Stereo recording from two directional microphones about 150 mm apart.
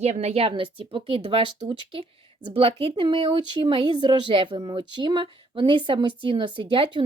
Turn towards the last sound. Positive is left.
turn(degrees=-35)  # may be behind; listen again after turning